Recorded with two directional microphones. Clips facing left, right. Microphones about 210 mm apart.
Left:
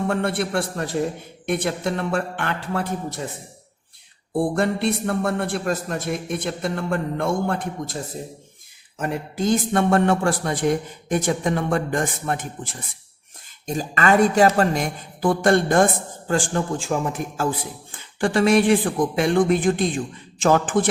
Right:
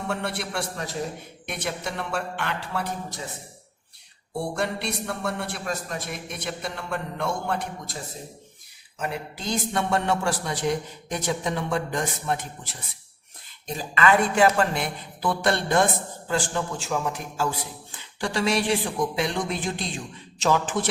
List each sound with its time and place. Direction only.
0.1 s speech: 55° left (ahead or behind)
4.4 s speech: 50° left (ahead or behind)
9.0 s speech: 50° left (ahead or behind)